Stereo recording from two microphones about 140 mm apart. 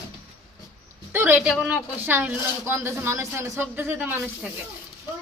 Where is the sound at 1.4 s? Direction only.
5° right (ahead or behind).